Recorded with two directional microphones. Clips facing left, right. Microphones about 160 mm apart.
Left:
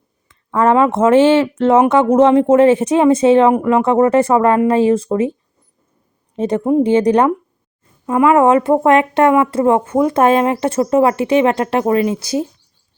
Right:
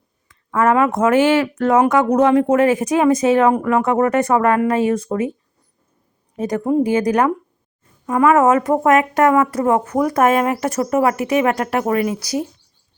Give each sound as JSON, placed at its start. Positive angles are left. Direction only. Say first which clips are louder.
{"t": 0.3, "sound": "speech", "louder": "left 3 dB", "side_deg": 30}
{"t": 6.3, "sound": "speech", "louder": "left 3 dB", "side_deg": 25}